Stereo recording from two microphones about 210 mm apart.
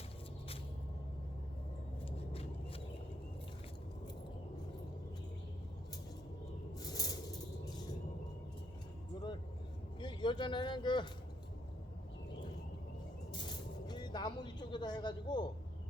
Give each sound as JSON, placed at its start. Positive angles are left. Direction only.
{"t": 2.0, "sound": "vehicle", "side_deg": 25}
{"t": 6.7, "sound": "a sound", "side_deg": 20}
{"t": 10.0, "sound": "speech", "side_deg": 20}
{"t": 13.3, "sound": "music", "side_deg": 20}